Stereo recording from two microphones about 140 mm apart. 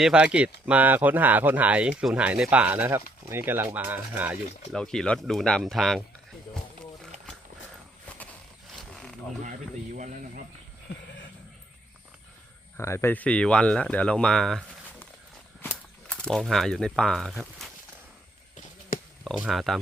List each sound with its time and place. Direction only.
0.0 s speech: 5° right (ahead or behind)
4.7 s speech: 5° left (ahead or behind)
8.7 s wild animals: centre (ahead or behind)
9.4 s a sound: 65° right (ahead or behind)
12.7 s speech: 20° left (ahead or behind); by 17.7 s centre (ahead or behind)
19.2 s speech: centre (ahead or behind)